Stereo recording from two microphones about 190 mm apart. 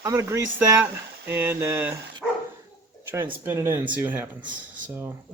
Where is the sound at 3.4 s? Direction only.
15° right (ahead or behind).